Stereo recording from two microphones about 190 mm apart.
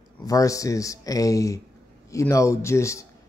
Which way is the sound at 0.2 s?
20° left (ahead or behind).